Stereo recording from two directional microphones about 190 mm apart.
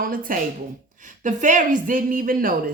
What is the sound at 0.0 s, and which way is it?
A woman's voice, 45° right (ahead or behind).